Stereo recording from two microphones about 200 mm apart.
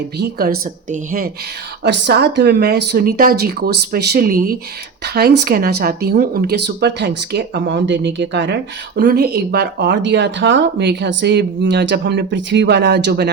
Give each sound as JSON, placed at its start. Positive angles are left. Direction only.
{"t": 0.2, "sound": "speech", "side_deg": -50}
{"t": 1.8, "sound": "speech", "side_deg": -60}
{"t": 9.0, "sound": "speech", "side_deg": -50}